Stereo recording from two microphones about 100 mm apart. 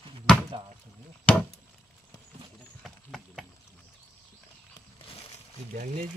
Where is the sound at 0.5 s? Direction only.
60° right (ahead or behind).